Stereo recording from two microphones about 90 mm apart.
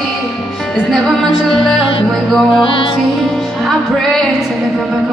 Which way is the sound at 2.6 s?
75° left (ahead or behind).